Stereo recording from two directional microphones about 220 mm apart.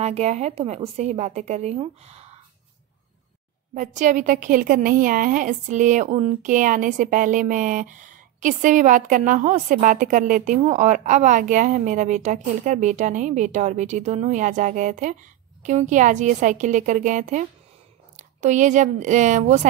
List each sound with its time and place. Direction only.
0.0 s a woman's voice: 30° right (ahead or behind)
3.7 s a woman's voice: 35° right (ahead or behind)